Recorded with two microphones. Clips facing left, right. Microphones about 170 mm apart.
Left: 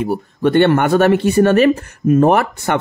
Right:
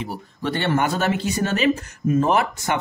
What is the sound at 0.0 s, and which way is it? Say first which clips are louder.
Speech: left 11 dB; 50° left (ahead or behind).